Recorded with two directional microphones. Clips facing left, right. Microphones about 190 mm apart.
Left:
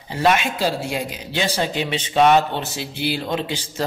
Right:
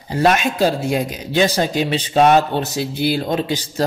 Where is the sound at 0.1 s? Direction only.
45° right (ahead or behind).